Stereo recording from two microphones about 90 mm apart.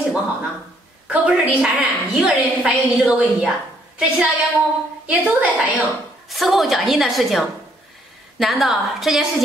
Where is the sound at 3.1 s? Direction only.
15° right (ahead or behind).